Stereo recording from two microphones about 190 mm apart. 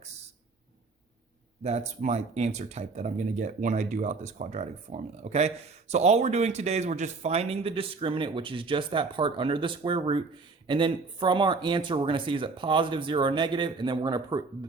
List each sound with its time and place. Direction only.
1.6 s speech: 35° right (ahead or behind)